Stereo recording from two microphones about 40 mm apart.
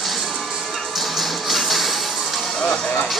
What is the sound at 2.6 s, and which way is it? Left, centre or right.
Music, centre.